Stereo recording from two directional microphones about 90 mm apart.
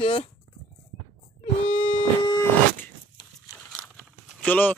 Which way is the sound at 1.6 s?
75° left (ahead or behind).